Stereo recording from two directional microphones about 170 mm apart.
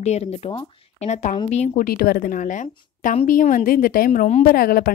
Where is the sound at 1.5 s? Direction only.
60° left (ahead or behind).